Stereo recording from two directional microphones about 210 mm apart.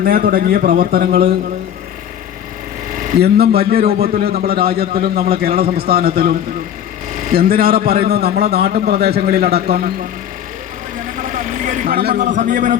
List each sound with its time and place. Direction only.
0.0 s a man's voice: 45° right (ahead or behind)
3.1 s a man's voice: 50° right (ahead or behind)
11.2 s a man's voice: 40° right (ahead or behind)